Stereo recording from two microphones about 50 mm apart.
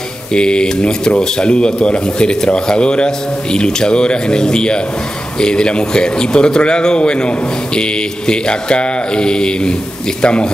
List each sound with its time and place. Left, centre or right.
0.3 s speech: centre